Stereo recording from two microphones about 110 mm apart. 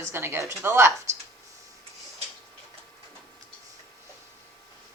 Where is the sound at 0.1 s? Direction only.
25° right (ahead or behind).